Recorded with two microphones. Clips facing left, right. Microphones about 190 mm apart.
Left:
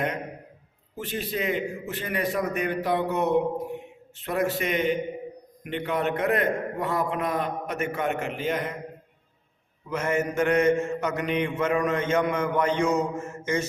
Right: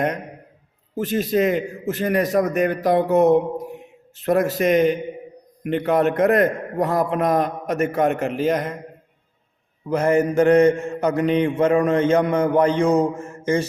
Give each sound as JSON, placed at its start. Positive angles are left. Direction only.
{"t": 0.9, "sound": "a man's voice", "side_deg": -45}
{"t": 9.9, "sound": "mantra", "side_deg": -35}